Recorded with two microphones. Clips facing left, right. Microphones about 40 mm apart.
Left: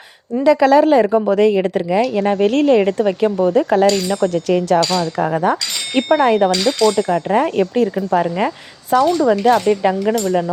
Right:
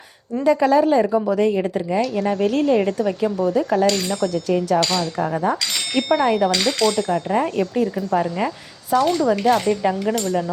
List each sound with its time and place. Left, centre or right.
0.4 s speech: left
5.9 s speech: left
6.1 s speech: left
8.9 s speech: left